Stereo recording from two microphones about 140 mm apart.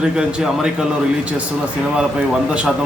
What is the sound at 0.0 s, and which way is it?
A man's voice, 5° right (ahead or behind).